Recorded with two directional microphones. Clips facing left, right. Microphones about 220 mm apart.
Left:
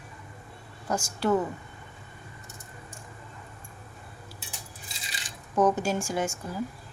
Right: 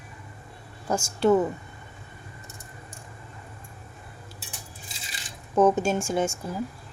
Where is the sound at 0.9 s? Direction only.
25° right (ahead or behind).